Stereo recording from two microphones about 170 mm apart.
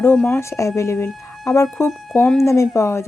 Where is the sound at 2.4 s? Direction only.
15° left (ahead or behind).